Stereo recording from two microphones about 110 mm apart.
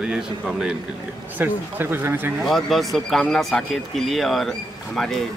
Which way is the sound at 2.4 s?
Centre (ahead or behind).